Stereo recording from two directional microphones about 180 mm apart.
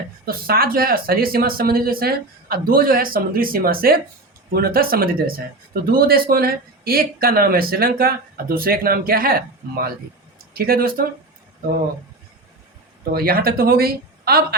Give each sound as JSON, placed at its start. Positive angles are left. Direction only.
{"t": 0.3, "sound": "speech", "side_deg": -55}
{"t": 13.1, "sound": "speech", "side_deg": -55}